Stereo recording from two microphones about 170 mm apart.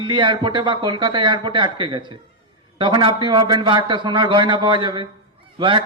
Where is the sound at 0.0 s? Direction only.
30° right (ahead or behind).